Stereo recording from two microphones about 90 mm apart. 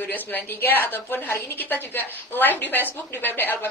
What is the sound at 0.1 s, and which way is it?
A woman's voice, 25° left (ahead or behind).